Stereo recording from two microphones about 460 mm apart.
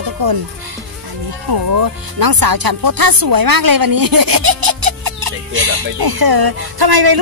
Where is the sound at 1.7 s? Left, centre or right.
Right.